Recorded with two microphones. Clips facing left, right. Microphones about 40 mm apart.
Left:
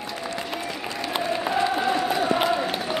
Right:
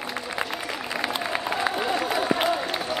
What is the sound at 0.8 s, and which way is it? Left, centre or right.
Applause, centre.